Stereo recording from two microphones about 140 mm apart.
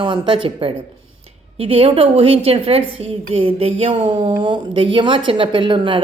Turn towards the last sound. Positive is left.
turn(degrees=-35)  # may be behind; listen again after turning